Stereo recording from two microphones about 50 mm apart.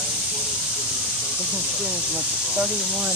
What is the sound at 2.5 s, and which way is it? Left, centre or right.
Speech, right.